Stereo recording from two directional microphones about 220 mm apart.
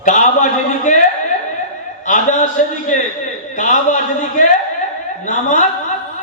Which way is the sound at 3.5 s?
35° left (ahead or behind).